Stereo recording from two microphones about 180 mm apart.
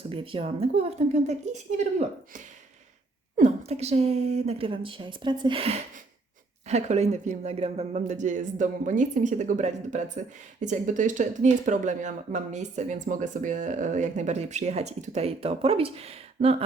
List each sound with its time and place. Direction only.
0.1 s speech: 30° right (ahead or behind)